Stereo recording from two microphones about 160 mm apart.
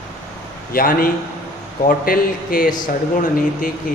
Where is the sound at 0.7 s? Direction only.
65° left (ahead or behind).